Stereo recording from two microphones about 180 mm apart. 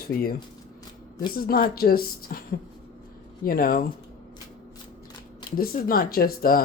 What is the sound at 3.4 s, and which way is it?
Speech, 55° left (ahead or behind).